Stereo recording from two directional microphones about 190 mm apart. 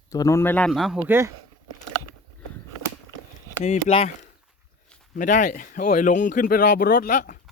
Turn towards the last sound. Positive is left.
turn(degrees=45)  # may be behind; listen again after turning